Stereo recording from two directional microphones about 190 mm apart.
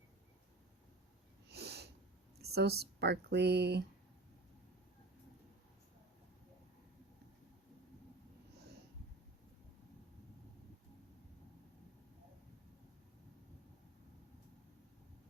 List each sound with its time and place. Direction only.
1.5 s snort: 60° right (ahead or behind)
2.6 s speech: 60° right (ahead or behind)